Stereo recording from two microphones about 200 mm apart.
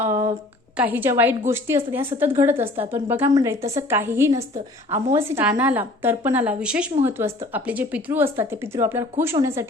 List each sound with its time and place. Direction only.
0.8 s a woman's voice: 10° right (ahead or behind)
2.6 s a woman's voice: 30° right (ahead or behind)
2.9 s a woman's voice: 10° right (ahead or behind)
4.4 s a woman's voice: 35° right (ahead or behind)
5.1 s a woman's voice: 10° right (ahead or behind)